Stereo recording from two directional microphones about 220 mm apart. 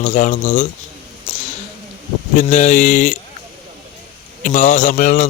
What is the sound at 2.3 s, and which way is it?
Speech, 35° left (ahead or behind).